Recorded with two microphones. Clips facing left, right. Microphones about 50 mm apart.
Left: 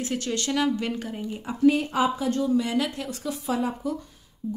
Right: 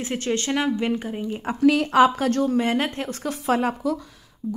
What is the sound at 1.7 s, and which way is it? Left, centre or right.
Speech, right.